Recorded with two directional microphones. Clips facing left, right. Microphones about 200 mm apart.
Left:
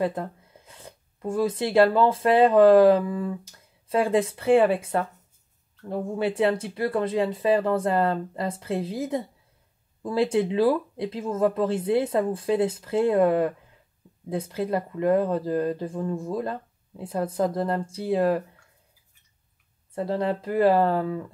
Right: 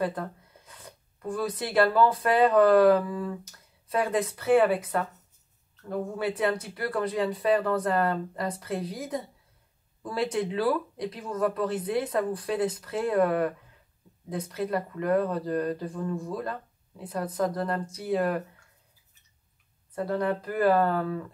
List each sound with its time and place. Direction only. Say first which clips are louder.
0.0 s speech: left 3 dB; 25° left (ahead or behind)
19.9 s speech: left 2 dB; 25° left (ahead or behind)